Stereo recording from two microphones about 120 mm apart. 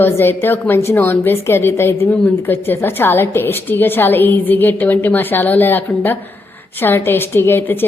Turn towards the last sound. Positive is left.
turn(degrees=20)  # may be behind; listen again after turning